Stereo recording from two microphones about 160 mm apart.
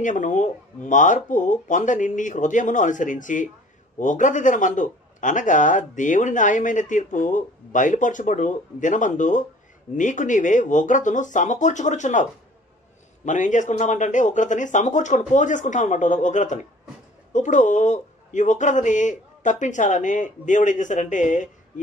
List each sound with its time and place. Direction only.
0.0 s a man's voice: 50° left (ahead or behind)